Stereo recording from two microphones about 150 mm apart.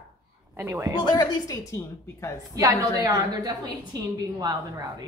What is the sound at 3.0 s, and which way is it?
Speech, 25° right (ahead or behind).